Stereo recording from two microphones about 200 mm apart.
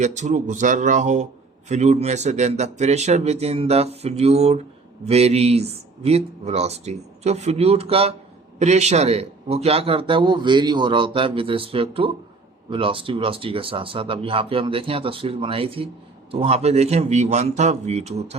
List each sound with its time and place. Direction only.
0.0 s a man's voice: 35° right (ahead or behind)